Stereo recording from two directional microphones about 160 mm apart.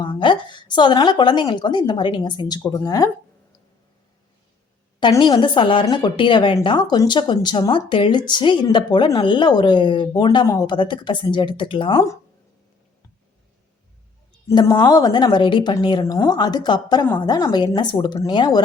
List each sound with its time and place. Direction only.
0.0 s a woman's voice: 30° left (ahead or behind)
4.9 s a woman's voice: 30° left (ahead or behind)
14.4 s a woman's voice: 20° left (ahead or behind)